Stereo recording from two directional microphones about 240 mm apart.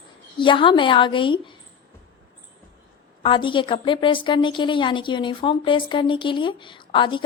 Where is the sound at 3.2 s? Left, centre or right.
Left.